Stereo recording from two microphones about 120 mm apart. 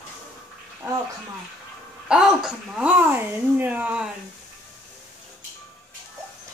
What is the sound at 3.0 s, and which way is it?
Speech, 15° right (ahead or behind).